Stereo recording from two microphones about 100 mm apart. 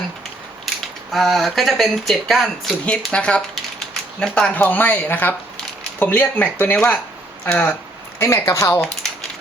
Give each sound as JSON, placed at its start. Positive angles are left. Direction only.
{"t": 1.1, "sound": "speech", "side_deg": 0}
{"t": 2.8, "sound": "speech", "side_deg": 10}